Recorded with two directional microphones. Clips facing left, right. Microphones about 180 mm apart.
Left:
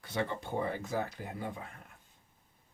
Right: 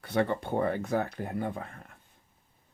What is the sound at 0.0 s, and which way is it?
Speech, 60° right (ahead or behind).